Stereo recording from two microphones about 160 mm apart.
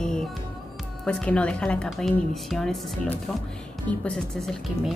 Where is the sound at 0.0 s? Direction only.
5° left (ahead or behind).